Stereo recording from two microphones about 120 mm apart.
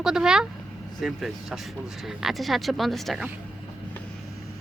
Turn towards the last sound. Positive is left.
turn(degrees=0)  # may be behind; listen again after turning